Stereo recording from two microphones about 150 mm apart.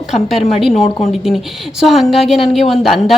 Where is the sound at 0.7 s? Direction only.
45° left (ahead or behind).